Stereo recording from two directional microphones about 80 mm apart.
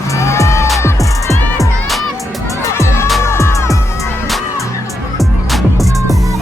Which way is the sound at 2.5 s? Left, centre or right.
Left.